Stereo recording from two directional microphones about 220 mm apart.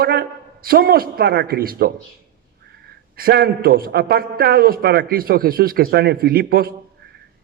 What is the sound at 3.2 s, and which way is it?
A man's voice, 45° right (ahead or behind).